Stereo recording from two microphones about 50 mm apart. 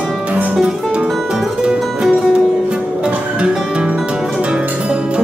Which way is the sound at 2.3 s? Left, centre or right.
Centre.